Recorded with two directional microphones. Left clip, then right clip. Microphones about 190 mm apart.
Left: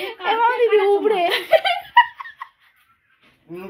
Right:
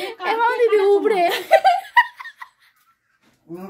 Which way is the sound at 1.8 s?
10° right (ahead or behind).